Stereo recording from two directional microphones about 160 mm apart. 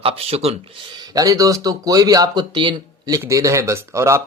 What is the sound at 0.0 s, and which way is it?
Speech, 40° right (ahead or behind).